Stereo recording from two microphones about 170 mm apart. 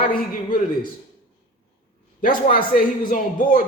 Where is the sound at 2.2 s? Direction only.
55° left (ahead or behind).